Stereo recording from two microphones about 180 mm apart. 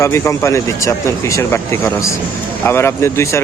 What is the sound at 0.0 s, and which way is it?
Speech, 15° left (ahead or behind).